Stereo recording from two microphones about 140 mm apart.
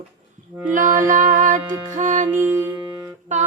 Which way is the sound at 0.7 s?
70° right (ahead or behind).